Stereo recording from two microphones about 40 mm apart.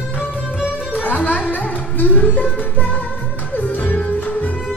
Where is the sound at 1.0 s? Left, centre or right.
Left.